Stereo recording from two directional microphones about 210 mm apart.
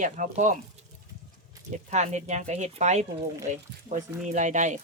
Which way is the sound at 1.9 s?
35° right (ahead or behind).